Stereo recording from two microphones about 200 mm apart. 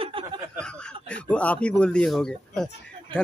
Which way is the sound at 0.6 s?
5° left (ahead or behind).